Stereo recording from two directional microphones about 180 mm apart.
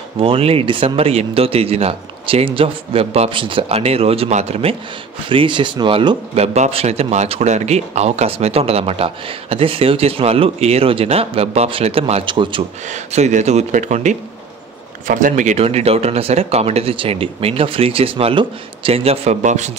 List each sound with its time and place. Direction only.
0.2 s speech: 30° right (ahead or behind)
12.8 s speech: 40° right (ahead or behind)